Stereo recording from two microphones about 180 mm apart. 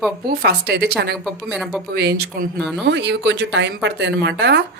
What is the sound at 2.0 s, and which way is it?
Speech, 65° right (ahead or behind).